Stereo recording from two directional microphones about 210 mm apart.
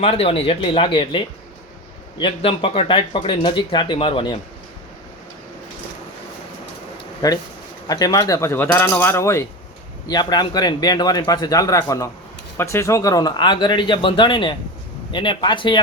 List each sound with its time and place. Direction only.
0.0 s speech: 30° left (ahead or behind)
7.2 s speech: 15° left (ahead or behind)